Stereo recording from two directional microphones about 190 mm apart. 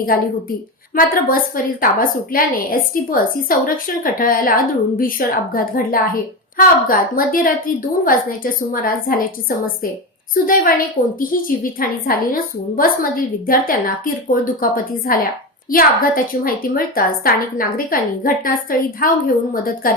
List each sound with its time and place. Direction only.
0.9 s a woman's voice: 45° left (ahead or behind)